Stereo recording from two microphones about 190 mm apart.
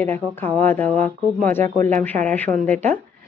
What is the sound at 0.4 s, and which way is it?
A woman's voice, 10° left (ahead or behind).